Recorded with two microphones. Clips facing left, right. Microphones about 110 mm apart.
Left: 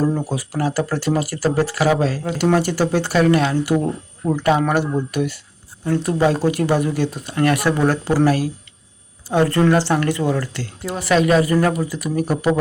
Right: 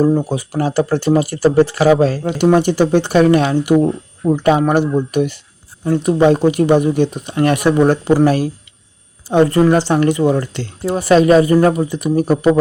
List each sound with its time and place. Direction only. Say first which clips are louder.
0.0 s speech: right 6 dB; 20° right (ahead or behind)